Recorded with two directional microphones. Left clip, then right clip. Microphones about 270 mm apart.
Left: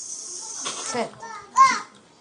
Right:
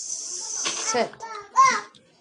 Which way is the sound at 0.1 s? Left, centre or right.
Centre.